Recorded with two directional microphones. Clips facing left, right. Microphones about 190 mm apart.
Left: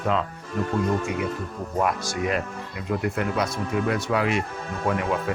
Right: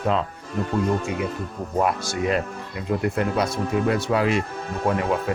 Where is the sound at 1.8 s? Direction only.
30° right (ahead or behind).